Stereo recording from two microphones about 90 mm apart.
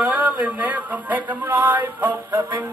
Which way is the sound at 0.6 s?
20° right (ahead or behind).